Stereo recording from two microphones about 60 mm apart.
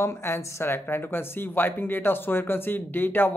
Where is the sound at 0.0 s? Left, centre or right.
Left.